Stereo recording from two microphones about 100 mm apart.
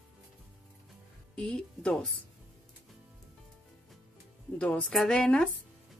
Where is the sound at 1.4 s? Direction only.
10° left (ahead or behind).